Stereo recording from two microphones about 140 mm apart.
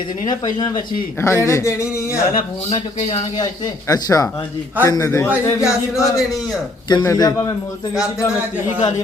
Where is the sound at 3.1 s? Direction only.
35° left (ahead or behind).